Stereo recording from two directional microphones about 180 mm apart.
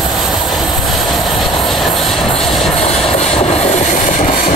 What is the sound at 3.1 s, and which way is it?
Train, 35° left (ahead or behind).